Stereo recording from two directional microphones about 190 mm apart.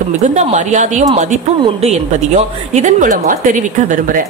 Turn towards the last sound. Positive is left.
turn(degrees=-45)  # may be behind; listen again after turning